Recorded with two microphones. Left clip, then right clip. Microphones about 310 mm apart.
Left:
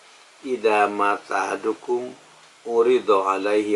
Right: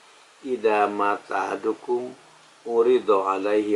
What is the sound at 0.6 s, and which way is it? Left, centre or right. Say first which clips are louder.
Speech: left 2 dB; centre.